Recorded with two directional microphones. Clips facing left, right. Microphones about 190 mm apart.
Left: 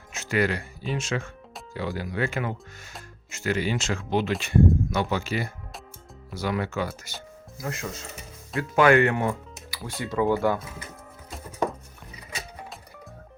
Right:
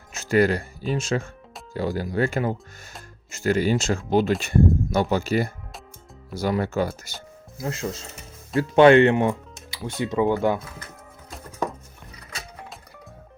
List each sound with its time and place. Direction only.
0.1 s speech: 40° right (ahead or behind); by 9.3 s 25° right (ahead or behind)
9.6 s music: 20° right (ahead or behind)
10.0 s speech: 20° right (ahead or behind)